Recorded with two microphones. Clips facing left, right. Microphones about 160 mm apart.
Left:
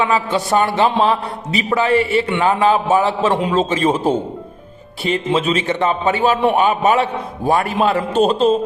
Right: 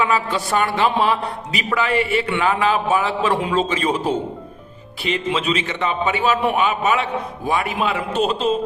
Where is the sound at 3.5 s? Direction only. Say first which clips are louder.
Left 3 dB; 35° left (ahead or behind).